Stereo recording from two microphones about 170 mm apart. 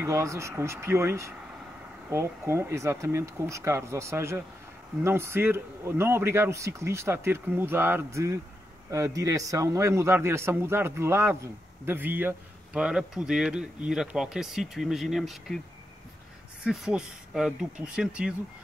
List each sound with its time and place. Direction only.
0.0 s a man's voice: 15° right (ahead or behind); by 15.6 s centre (ahead or behind)
16.6 s speech: 5° right (ahead or behind)